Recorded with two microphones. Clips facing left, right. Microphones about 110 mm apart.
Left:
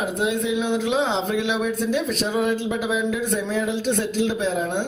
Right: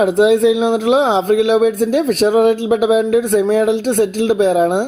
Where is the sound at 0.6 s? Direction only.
55° right (ahead or behind).